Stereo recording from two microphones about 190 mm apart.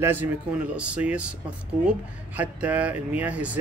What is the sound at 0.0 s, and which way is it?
Speech, 10° right (ahead or behind).